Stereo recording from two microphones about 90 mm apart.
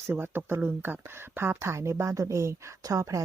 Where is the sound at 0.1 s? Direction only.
25° right (ahead or behind).